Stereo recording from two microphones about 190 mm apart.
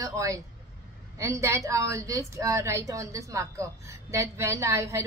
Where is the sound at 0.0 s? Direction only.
15° right (ahead or behind).